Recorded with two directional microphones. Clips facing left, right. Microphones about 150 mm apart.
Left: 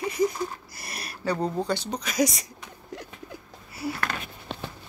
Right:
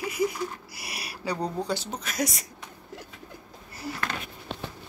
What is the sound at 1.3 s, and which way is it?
Speech, 10° left (ahead or behind).